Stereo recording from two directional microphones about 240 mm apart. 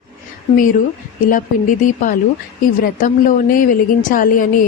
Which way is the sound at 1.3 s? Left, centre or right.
Left.